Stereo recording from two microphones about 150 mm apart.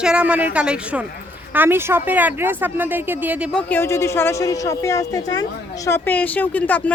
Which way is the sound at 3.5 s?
15° left (ahead or behind).